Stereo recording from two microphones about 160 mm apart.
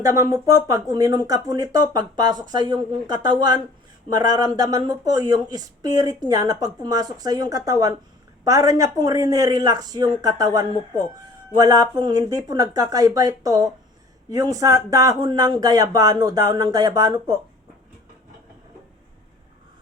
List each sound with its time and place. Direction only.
0.0 s speech: 20° right (ahead or behind)